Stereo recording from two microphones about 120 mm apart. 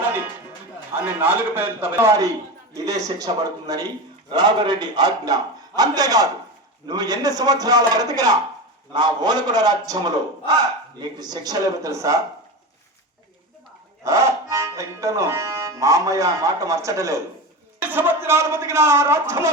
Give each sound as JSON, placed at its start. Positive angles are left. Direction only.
{"t": 1.0, "sound": "a man's voice", "side_deg": -15}
{"t": 2.7, "sound": "a man's voice", "side_deg": -30}
{"t": 14.0, "sound": "speech", "side_deg": -25}
{"t": 17.7, "sound": "speech", "side_deg": -15}